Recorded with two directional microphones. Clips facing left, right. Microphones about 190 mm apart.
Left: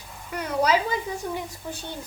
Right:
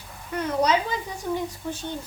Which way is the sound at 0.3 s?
10° left (ahead or behind).